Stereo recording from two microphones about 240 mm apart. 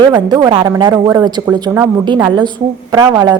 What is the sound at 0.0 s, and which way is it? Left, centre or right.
A woman's voice, centre.